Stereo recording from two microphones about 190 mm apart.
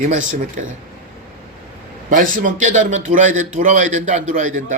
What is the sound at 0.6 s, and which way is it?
Speech, 40° right (ahead or behind).